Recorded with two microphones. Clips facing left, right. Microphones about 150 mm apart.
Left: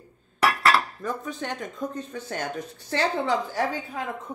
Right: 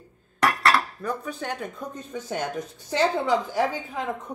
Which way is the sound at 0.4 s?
10° left (ahead or behind).